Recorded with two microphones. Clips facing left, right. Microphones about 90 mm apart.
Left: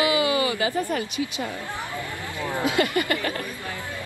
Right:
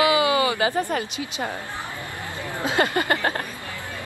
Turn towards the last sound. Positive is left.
turn(degrees=-35)  # may be behind; listen again after turning